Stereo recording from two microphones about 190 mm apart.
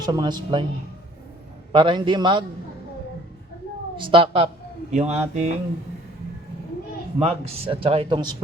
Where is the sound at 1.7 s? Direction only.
25° right (ahead or behind).